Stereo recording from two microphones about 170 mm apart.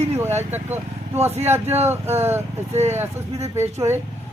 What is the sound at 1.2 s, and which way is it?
Speech, 15° right (ahead or behind).